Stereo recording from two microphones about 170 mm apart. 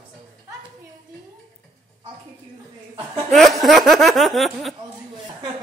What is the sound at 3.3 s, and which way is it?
Speech, centre (ahead or behind).